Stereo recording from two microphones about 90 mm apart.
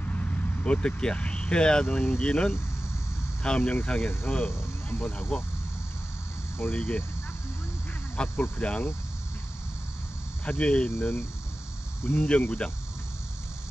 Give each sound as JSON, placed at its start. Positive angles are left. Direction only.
{"t": 0.0, "sound": "speech", "side_deg": 15}
{"t": 4.5, "sound": "speech", "side_deg": 25}
{"t": 6.6, "sound": "speech", "side_deg": 15}
{"t": 8.2, "sound": "speech", "side_deg": 10}
{"t": 10.4, "sound": "speech", "side_deg": 15}
{"t": 11.0, "sound": "speech", "side_deg": 20}
{"t": 12.3, "sound": "speech", "side_deg": 10}